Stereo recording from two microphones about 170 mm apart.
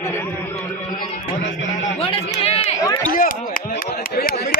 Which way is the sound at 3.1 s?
55° left (ahead or behind).